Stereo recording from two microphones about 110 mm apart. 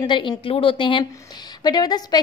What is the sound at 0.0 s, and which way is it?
A woman's voice, 45° left (ahead or behind).